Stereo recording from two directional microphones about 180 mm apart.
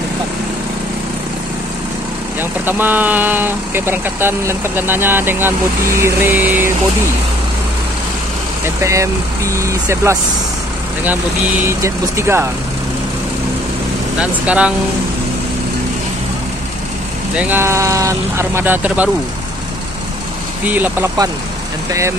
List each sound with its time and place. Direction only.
2.6 s speech: 10° right (ahead or behind)
8.8 s speech: 15° right (ahead or behind)
11.6 s speech: 15° right (ahead or behind)
14.1 s speech: 5° right (ahead or behind)
17.4 s speech: 10° right (ahead or behind)
20.6 s speech: 10° right (ahead or behind)